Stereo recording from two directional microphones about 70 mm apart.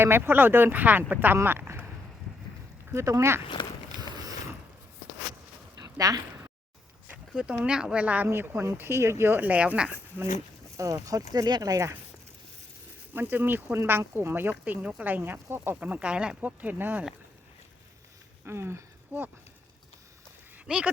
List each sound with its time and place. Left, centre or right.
0.0 s speech: right
1.5 s a sound: right
2.9 s speech: right
3.9 s a sound: right
5.7 s a sound: right
7.3 s speech: centre
8.3 s speech: right; by 9.9 s centre
10.8 s speech: right
13.1 s speech: right
14.6 s speech: centre; by 15.8 s right
15.8 s speech: centre
18.4 s speech: right
20.7 s speech: centre